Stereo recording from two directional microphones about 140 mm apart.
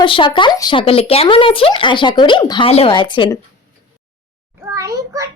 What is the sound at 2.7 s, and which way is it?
Speech, 45° left (ahead or behind).